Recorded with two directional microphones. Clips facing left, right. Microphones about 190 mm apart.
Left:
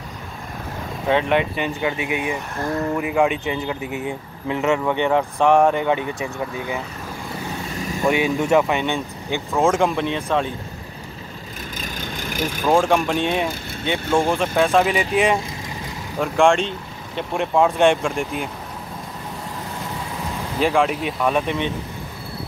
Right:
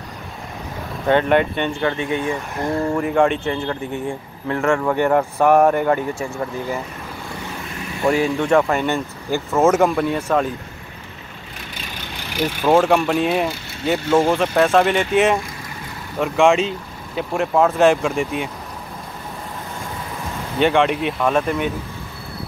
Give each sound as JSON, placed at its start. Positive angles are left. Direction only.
{"t": 1.0, "sound": "speech", "side_deg": 0}
{"t": 8.0, "sound": "speech", "side_deg": 5}
{"t": 11.8, "sound": "vehicle", "side_deg": 45}
{"t": 12.6, "sound": "speech", "side_deg": 0}
{"t": 20.5, "sound": "speech", "side_deg": 0}